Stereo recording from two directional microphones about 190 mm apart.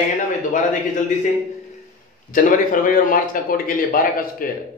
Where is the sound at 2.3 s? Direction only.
45° left (ahead or behind).